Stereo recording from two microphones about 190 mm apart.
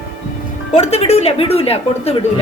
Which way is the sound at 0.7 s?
35° left (ahead or behind).